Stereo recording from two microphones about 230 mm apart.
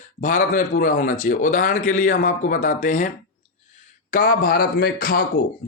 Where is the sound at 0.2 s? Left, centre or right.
Left.